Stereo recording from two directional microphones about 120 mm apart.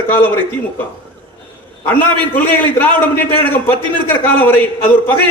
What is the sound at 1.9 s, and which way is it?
A man's voice, 15° left (ahead or behind).